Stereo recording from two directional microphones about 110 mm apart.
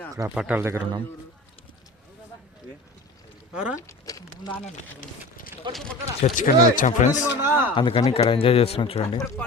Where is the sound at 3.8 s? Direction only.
35° left (ahead or behind).